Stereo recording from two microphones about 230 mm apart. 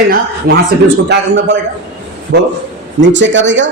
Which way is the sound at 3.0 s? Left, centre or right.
Right.